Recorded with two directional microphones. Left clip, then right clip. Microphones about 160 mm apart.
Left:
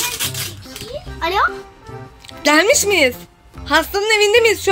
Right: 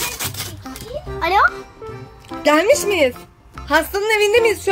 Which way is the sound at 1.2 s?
15° right (ahead or behind).